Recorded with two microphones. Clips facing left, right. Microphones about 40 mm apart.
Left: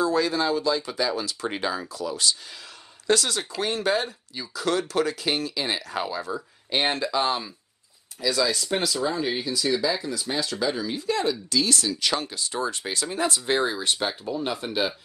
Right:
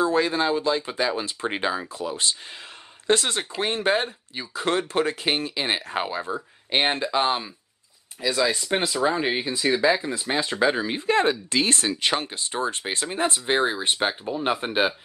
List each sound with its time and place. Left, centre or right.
0.0 s speech: right